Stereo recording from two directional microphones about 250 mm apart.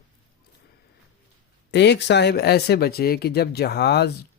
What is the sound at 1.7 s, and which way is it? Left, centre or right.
Speech, left.